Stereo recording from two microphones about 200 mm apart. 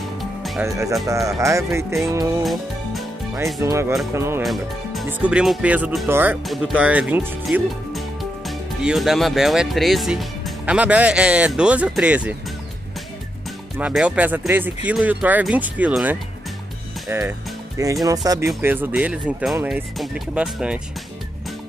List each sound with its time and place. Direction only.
0.2 s music: centre (ahead or behind)
0.7 s speech: 15° right (ahead or behind)
2.4 s music: centre (ahead or behind)
3.6 s speech: 15° right (ahead or behind)
4.4 s speech: centre (ahead or behind)
13.7 s speech: 5° right (ahead or behind)